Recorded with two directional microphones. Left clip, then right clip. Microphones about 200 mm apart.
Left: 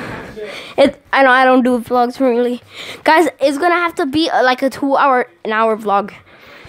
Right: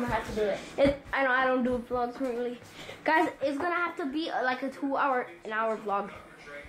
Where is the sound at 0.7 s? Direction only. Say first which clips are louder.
Left 15 dB; 50° left (ahead or behind).